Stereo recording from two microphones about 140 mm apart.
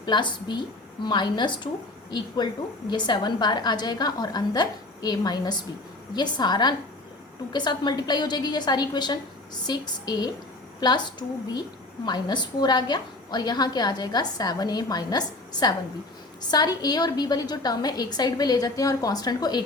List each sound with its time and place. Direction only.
0.0 s a woman's voice: 35° left (ahead or behind)
16.4 s a woman's voice: 30° left (ahead or behind)